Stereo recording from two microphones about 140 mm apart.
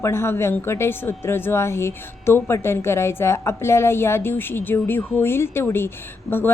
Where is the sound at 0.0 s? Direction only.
20° left (ahead or behind).